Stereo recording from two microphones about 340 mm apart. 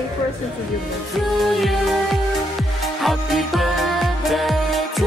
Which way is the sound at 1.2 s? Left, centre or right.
Centre.